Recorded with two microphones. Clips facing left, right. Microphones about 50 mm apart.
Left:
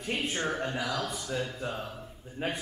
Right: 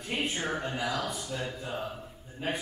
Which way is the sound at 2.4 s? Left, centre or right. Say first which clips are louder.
Even; left.